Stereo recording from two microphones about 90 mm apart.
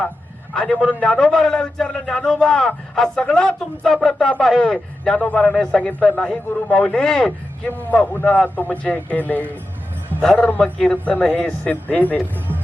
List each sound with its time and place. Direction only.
0.5 s a man's voice: 10° left (ahead or behind)